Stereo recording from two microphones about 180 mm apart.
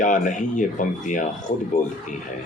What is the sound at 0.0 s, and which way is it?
A man's voice, 45° left (ahead or behind).